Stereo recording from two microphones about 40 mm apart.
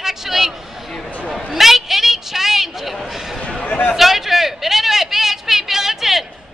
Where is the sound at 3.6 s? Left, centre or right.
Left.